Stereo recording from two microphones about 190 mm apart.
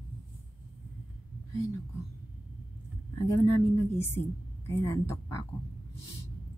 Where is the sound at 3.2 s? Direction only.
15° left (ahead or behind).